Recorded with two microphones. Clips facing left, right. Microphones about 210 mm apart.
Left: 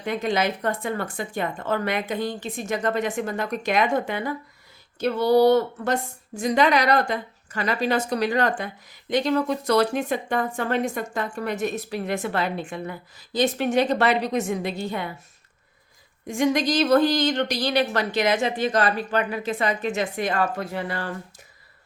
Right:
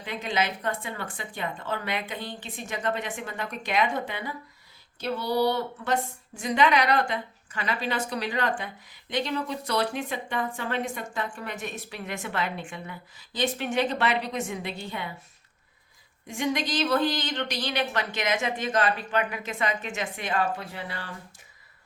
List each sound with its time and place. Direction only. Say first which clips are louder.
0.0 s a woman's voice: left 5 dB; 45° left (ahead or behind)
16.2 s a woman's voice: left 7 dB; 45° left (ahead or behind)